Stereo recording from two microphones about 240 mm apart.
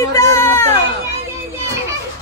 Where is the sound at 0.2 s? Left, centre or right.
Centre.